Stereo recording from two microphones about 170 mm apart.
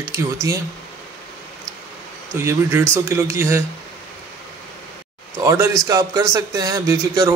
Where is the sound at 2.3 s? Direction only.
15° right (ahead or behind).